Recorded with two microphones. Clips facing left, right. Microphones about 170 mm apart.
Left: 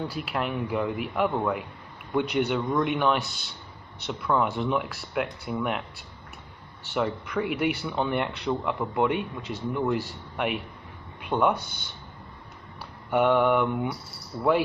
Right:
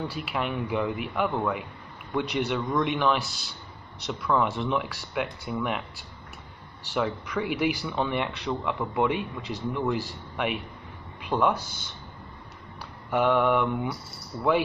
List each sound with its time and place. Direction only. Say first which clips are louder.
0.0 s speech: left 1 dB; centre (ahead or behind)
11.5 s speech: even; 65° left (ahead or behind)
13.1 s speech: left 1 dB; centre (ahead or behind)